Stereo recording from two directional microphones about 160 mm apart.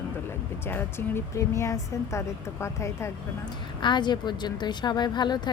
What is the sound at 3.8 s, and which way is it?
A woman's voice, 30° left (ahead or behind).